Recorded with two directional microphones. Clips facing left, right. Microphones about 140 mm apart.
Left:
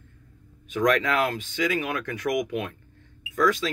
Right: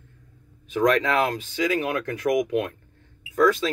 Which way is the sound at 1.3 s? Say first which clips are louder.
Right 2 dB; 35° right (ahead or behind).